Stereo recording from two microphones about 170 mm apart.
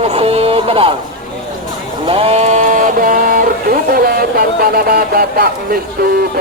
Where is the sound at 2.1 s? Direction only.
35° right (ahead or behind); by 5.5 s 65° right (ahead or behind).